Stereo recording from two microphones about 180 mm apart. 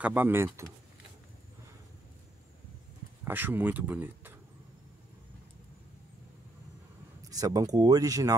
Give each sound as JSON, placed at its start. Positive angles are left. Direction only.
{"t": 0.0, "sound": "speech", "side_deg": -10}
{"t": 3.3, "sound": "speech", "side_deg": -10}
{"t": 7.2, "sound": "speech", "side_deg": -20}